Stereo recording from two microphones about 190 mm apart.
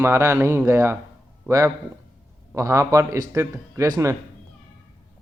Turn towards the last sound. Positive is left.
turn(degrees=-20)  # may be behind; listen again after turning